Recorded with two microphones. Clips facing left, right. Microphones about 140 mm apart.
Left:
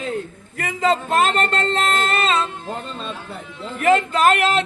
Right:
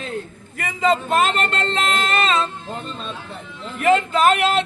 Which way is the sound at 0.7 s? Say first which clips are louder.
Even; 40° left (ahead or behind).